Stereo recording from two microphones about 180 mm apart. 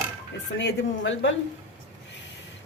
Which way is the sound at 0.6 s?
85° left.